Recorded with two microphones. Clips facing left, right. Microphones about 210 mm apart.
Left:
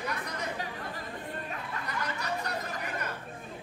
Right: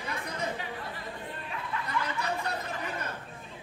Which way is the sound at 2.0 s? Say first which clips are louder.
Right 3 dB; 40° left (ahead or behind).